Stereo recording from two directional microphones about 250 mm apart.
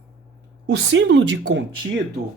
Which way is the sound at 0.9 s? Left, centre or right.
Right.